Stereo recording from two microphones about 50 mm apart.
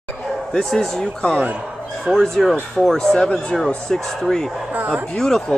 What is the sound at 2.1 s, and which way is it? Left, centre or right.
Speech, centre.